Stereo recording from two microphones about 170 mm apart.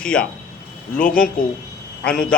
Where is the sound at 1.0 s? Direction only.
55° left (ahead or behind).